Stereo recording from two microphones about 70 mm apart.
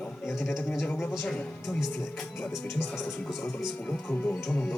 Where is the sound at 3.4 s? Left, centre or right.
Left.